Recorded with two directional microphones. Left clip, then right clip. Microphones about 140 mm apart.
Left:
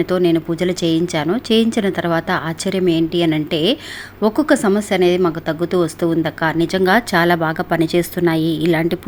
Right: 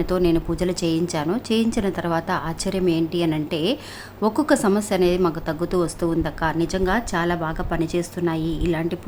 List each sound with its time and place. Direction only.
0.0 s a woman's voice: 15° left (ahead or behind)